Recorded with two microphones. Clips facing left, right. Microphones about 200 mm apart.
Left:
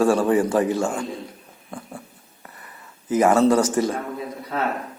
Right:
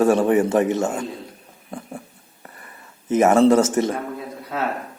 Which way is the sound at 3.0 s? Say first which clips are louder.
Right 2 dB; 25° right (ahead or behind).